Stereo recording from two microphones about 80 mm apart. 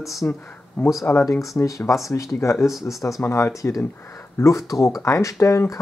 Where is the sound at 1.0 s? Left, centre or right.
Left.